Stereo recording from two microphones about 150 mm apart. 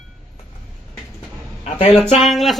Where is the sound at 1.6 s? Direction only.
45° left (ahead or behind).